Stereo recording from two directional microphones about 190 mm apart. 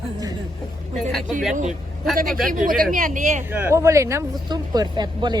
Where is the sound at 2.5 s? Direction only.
50° right (ahead or behind).